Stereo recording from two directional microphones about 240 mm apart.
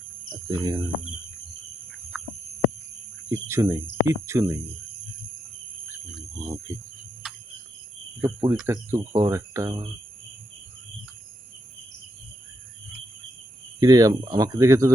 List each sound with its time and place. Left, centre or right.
0.4 s speech: centre
3.2 s speech: centre
6.3 s a sound: centre
8.2 s speech: centre
13.7 s speech: centre